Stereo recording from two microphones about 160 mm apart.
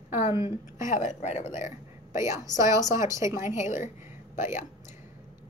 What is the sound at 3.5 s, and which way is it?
Speech, 50° left (ahead or behind).